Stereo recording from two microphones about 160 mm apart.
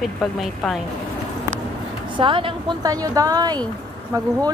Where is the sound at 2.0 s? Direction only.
30° right (ahead or behind).